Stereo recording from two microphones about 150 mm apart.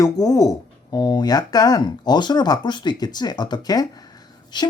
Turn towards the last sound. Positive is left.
turn(degrees=30)  # may be behind; listen again after turning